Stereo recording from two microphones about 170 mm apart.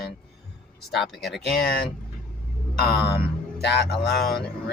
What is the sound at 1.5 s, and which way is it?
Speech, 65° left (ahead or behind).